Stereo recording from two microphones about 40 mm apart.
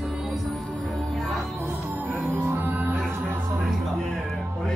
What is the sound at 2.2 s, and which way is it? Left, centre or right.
Music, right.